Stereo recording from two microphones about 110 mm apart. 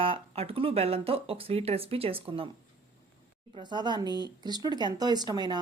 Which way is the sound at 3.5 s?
45° right (ahead or behind).